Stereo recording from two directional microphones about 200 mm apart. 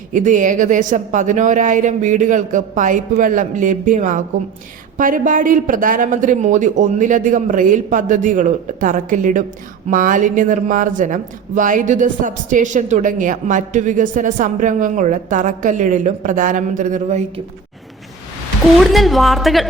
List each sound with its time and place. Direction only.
0.1 s speech: 40° right (ahead or behind)
18.8 s a woman's voice: centre (ahead or behind)